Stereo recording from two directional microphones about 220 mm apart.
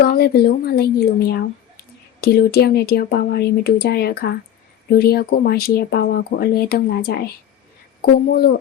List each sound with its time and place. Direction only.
0.0 s speech: 45° left (ahead or behind)